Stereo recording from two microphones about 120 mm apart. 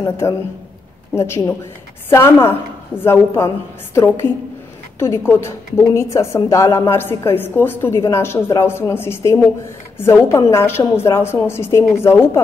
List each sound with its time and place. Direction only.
1.1 s a woman's voice: 20° left (ahead or behind)